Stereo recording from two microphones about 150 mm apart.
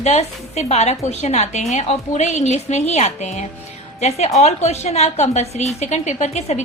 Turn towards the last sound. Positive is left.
turn(degrees=50)  # may be behind; listen again after turning